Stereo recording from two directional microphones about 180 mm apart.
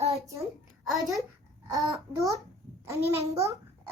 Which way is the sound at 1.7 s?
15° right (ahead or behind).